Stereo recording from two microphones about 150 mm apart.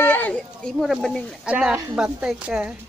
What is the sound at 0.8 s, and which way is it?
Speech, centre (ahead or behind).